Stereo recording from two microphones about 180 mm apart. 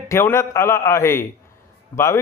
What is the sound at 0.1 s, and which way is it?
A man's voice, 15° left (ahead or behind).